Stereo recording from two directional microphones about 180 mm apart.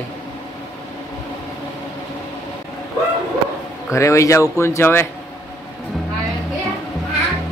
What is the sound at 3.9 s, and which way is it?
Speech, 15° left (ahead or behind).